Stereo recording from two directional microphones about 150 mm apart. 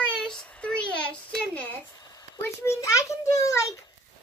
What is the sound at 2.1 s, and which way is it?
A child's voice, 20° left (ahead or behind).